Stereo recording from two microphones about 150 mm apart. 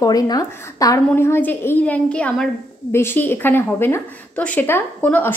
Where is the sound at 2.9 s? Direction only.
15° left (ahead or behind).